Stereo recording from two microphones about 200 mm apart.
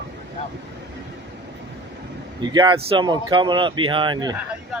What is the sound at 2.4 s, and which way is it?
Speech, 20° right (ahead or behind).